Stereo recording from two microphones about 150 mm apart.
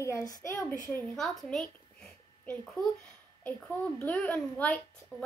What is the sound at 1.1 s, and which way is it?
Speech, centre (ahead or behind).